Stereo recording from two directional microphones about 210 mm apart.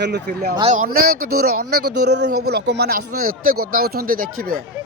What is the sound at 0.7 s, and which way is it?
Speech, 40° right (ahead or behind).